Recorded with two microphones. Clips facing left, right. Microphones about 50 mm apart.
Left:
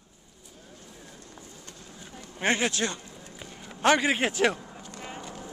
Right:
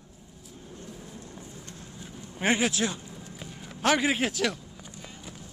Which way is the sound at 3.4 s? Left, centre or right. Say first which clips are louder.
Left 3 dB; centre.